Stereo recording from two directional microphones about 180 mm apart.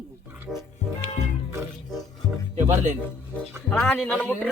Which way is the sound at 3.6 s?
10° left (ahead or behind).